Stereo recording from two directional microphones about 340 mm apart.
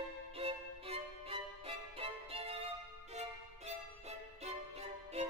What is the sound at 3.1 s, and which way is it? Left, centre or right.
Music, centre.